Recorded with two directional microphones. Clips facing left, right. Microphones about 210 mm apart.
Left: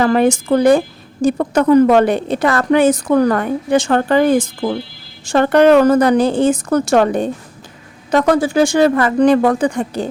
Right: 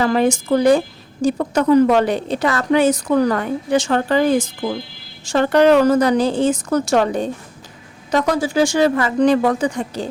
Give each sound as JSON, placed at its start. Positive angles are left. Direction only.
{"t": 0.0, "sound": "a woman's voice", "side_deg": 55}